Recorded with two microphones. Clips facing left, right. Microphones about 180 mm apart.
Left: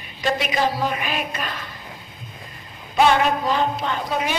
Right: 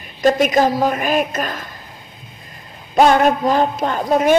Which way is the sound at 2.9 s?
45° right (ahead or behind).